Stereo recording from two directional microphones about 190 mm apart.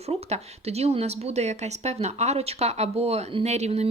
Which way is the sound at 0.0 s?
35° right (ahead or behind).